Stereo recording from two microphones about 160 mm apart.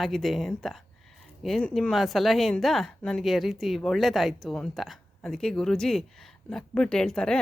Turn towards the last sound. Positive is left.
turn(degrees=5)  # may be behind; listen again after turning